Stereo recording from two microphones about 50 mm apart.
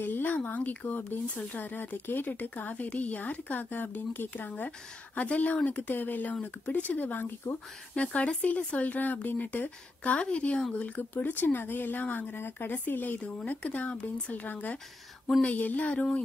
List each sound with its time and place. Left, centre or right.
0.0 s speech: left
7.9 s speech: left
11.1 s speech: left
12.0 s speech: left
12.4 s speech: left